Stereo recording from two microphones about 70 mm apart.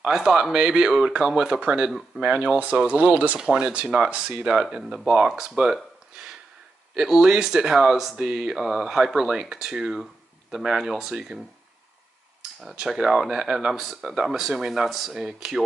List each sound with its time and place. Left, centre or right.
0.0 s speech: centre
7.0 s speech: centre
12.7 s speech: centre